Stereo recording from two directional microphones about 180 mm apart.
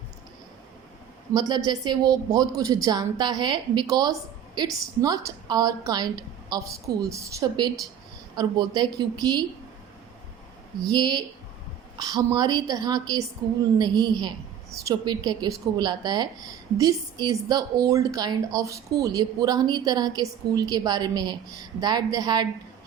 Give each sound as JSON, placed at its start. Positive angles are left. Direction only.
{"t": 1.3, "sound": "a woman's voice", "side_deg": -25}
{"t": 10.8, "sound": "a woman's voice", "side_deg": -25}